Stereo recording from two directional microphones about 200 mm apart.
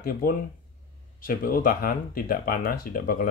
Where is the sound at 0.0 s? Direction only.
45° left (ahead or behind).